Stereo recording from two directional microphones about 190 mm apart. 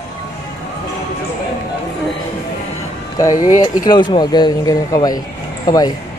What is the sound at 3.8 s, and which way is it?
Speech, 25° left (ahead or behind).